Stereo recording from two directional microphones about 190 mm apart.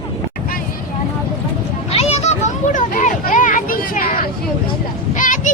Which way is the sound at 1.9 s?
35° left (ahead or behind).